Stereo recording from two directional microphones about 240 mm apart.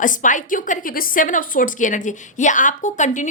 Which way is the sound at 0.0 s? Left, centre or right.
Left.